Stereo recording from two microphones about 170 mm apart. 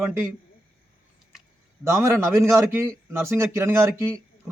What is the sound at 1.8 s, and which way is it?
A man's voice, 15° right (ahead or behind).